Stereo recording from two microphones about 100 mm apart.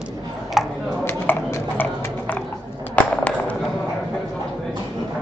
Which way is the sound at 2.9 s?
15° left (ahead or behind).